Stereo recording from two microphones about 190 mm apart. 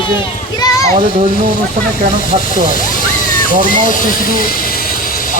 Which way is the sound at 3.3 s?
45° left (ahead or behind).